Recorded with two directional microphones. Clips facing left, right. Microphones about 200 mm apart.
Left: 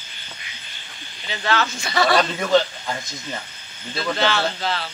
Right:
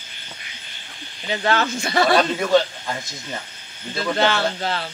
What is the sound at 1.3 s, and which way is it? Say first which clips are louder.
Speech: right 2 dB; 50° right (ahead or behind).